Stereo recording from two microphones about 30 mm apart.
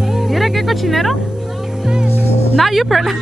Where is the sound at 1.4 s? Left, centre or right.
Centre.